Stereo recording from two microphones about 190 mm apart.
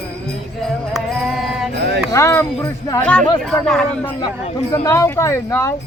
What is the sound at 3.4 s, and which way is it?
Speech, centre (ahead or behind).